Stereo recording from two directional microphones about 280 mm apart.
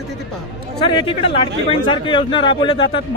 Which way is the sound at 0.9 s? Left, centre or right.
Centre.